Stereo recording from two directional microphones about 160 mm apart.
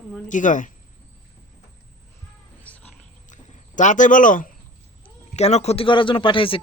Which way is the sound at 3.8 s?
50° left (ahead or behind).